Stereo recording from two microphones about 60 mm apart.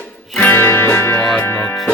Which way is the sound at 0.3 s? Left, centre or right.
Left.